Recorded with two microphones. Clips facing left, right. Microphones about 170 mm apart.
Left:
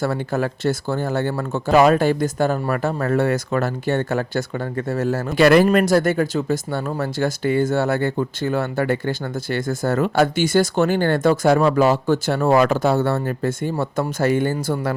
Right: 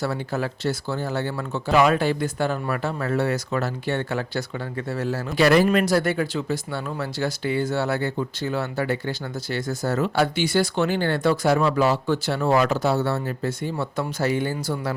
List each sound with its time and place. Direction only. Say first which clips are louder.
0.0 s speech: left 4 dB; 50° left (ahead or behind)